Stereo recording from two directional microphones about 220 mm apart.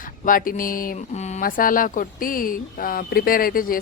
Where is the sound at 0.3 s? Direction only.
40° left (ahead or behind).